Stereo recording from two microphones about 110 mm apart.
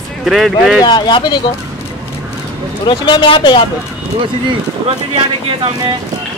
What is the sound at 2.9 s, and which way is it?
Speech, 45° left (ahead or behind).